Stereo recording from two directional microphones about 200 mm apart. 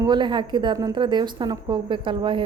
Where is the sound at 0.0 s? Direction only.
20° right (ahead or behind).